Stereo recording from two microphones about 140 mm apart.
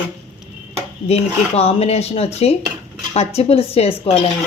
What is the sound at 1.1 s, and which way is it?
Speech, 45° left (ahead or behind).